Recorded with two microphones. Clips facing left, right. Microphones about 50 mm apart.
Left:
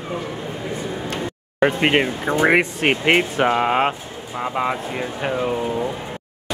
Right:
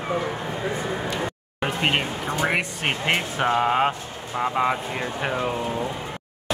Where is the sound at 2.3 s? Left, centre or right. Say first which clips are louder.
Left 7 dB; left.